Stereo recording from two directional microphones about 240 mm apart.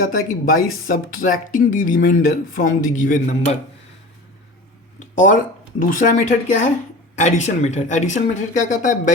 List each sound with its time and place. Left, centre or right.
0.0 s speech: left
4.9 s a sound: left
5.8 s speech: left